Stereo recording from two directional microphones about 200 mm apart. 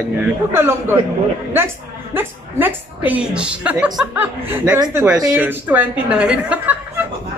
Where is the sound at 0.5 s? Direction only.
10° right (ahead or behind).